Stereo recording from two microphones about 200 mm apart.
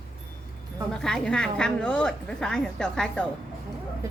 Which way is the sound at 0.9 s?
5° left (ahead or behind).